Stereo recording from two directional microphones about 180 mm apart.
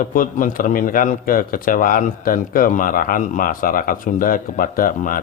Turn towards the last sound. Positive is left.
turn(degrees=50)  # may be behind; listen again after turning